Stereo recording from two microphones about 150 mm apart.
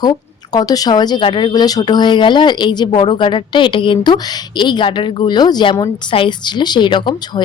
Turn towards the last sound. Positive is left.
turn(degrees=30)  # may be behind; listen again after turning